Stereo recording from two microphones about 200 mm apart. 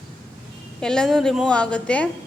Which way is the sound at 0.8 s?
5° left (ahead or behind).